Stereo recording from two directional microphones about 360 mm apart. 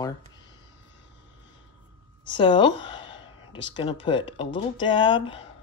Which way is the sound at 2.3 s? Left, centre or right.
Centre.